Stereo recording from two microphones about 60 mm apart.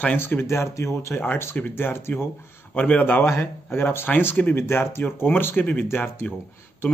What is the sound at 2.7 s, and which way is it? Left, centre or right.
Speech, left.